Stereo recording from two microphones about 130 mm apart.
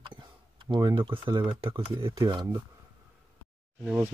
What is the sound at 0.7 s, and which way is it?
Speech, 35° right (ahead or behind).